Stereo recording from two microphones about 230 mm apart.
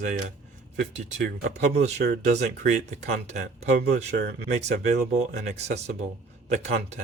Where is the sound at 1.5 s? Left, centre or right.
Right.